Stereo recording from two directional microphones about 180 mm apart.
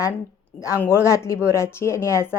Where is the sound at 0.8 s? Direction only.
15° left (ahead or behind).